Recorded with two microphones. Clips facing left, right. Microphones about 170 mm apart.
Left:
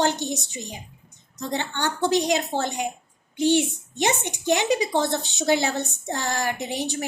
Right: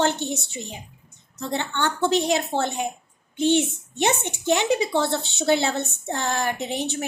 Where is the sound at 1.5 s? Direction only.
55° right (ahead or behind).